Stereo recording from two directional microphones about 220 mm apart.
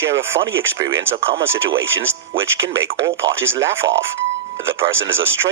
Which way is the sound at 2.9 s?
55° right (ahead or behind).